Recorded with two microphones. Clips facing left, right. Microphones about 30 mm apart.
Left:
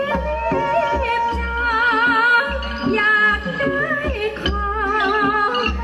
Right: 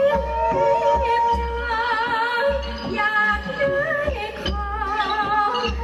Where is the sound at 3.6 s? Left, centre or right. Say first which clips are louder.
Right 2 dB; left.